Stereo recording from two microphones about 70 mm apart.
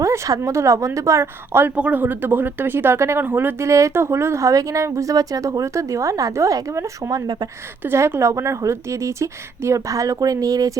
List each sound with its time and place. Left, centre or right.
0.0 s speech: right
1.5 s speech: right
3.7 s speech: right
7.1 s speech: right
7.9 s speech: right